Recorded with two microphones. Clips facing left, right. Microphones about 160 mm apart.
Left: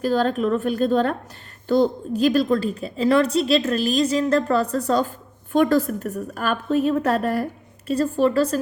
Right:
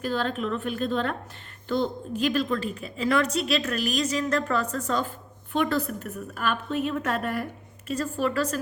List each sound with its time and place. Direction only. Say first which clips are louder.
0.0 s a woman's voice: left 7 dB; 40° left (ahead or behind)